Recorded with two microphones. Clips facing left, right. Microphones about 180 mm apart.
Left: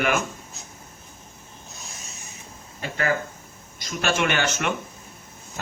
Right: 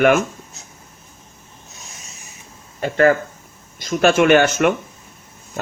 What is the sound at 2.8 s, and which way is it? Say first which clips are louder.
A man's voice: right 10 dB; 50° right (ahead or behind).